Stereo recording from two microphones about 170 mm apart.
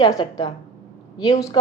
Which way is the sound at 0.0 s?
20° left (ahead or behind).